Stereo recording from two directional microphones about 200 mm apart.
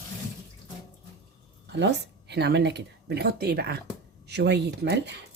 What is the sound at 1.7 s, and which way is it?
Speech, 60° right (ahead or behind).